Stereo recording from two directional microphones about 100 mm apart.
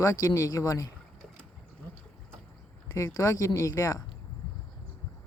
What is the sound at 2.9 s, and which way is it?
Speech, 30° left (ahead or behind).